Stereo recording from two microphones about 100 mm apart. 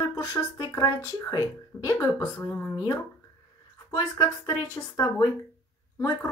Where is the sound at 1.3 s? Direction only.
40° left (ahead or behind).